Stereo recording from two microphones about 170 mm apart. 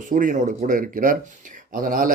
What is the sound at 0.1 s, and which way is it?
A man's voice, 50° right (ahead or behind).